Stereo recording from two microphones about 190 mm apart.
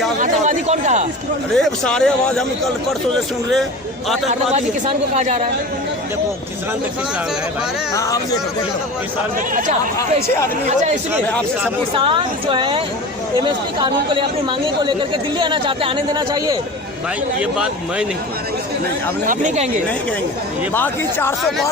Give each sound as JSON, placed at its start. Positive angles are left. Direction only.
{"t": 0.2, "sound": "a sound", "side_deg": -40}
{"t": 1.5, "sound": "speech", "side_deg": 5}
{"t": 5.1, "sound": "speech", "side_deg": -40}
{"t": 7.9, "sound": "speech", "side_deg": 20}
{"t": 10.2, "sound": "speech", "side_deg": 15}
{"t": 11.9, "sound": "speech", "side_deg": -25}
{"t": 15.4, "sound": "speech", "side_deg": -25}
{"t": 19.3, "sound": "speech", "side_deg": -40}
{"t": 20.7, "sound": "speech", "side_deg": 10}